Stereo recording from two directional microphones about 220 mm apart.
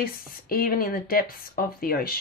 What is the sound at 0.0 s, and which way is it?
Speech, 40° left (ahead or behind).